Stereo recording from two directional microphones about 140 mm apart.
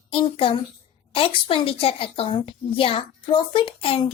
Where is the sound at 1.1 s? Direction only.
40° left (ahead or behind).